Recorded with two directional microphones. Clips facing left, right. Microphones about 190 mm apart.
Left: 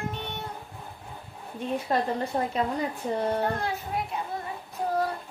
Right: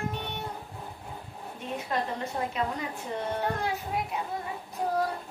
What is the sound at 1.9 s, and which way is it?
Speech, 35° left (ahead or behind).